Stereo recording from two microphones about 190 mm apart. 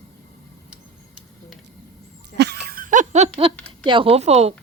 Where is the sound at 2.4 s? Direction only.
55° right (ahead or behind); by 3.5 s 30° right (ahead or behind).